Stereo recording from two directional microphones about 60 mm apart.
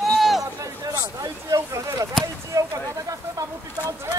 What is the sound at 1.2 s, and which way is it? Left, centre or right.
Speech, right.